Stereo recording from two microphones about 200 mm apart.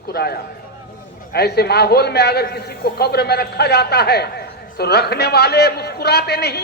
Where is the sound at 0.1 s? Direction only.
50° left (ahead or behind).